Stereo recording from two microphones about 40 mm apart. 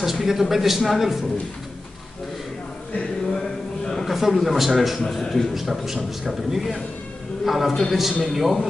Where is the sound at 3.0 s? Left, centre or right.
Centre.